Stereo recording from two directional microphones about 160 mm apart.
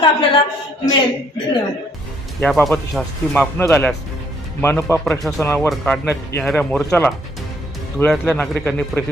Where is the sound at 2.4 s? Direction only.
5° left (ahead or behind).